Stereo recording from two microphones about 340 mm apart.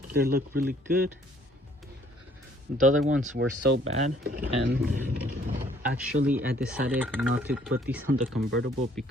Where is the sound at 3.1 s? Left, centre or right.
Right.